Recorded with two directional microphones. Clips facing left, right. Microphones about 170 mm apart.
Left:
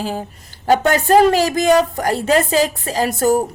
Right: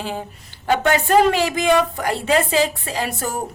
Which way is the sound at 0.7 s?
40° left (ahead or behind).